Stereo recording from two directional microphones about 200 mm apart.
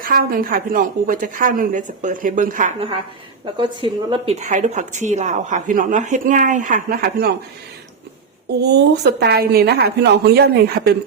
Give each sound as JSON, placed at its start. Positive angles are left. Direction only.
{"t": 0.0, "sound": "a woman's voice", "side_deg": -45}
{"t": 3.4, "sound": "a woman's voice", "side_deg": -20}
{"t": 4.4, "sound": "a woman's voice", "side_deg": -35}
{"t": 8.4, "sound": "a woman's voice", "side_deg": -55}